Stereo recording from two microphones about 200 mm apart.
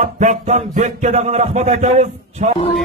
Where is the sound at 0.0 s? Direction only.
35° right (ahead or behind).